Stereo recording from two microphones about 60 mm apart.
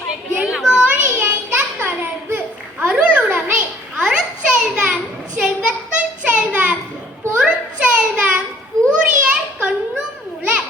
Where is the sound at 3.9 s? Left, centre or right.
Centre.